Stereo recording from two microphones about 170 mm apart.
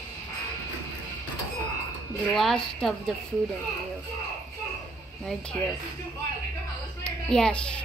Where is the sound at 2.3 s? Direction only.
Centre (ahead or behind).